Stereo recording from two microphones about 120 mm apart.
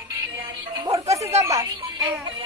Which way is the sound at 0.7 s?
30° right (ahead or behind).